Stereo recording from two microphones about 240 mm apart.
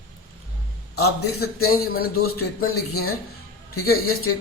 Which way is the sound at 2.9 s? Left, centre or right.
Left.